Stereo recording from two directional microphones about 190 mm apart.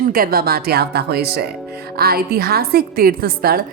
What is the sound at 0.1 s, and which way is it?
A woman's voice, 50° right (ahead or behind).